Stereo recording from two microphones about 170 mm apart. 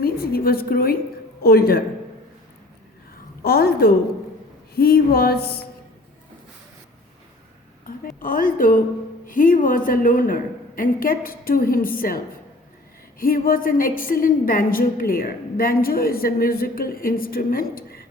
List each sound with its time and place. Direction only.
0.0 s a woman's voice: 60° left (ahead or behind)
3.4 s a sound: 65° left (ahead or behind)
4.7 s a woman's voice: 60° left (ahead or behind)
7.9 s a woman's voice: 55° left (ahead or behind)